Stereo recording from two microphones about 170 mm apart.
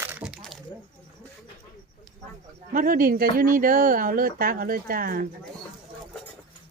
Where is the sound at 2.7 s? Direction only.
55° right (ahead or behind).